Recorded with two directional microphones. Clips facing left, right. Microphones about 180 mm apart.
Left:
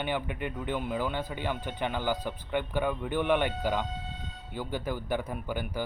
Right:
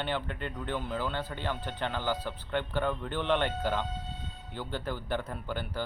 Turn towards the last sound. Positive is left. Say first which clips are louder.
# left 2 dB
turn(degrees=10)  # may be behind; listen again after turning